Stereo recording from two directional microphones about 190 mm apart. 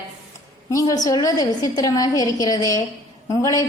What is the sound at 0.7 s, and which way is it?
A woman's voice, 20° left (ahead or behind).